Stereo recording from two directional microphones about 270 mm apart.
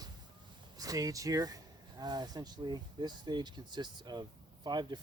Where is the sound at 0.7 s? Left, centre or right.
Centre.